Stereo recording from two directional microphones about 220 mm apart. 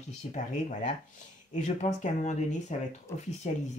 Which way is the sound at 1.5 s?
30° left (ahead or behind).